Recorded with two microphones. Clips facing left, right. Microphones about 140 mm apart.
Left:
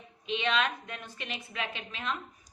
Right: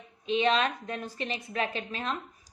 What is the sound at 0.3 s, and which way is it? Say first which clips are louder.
A woman's voice: right 4 dB; 40° right (ahead or behind).